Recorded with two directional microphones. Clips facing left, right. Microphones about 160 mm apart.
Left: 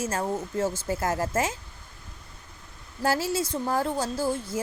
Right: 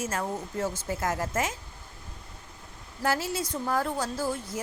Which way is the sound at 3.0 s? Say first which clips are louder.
Left 3 dB; 30° left (ahead or behind).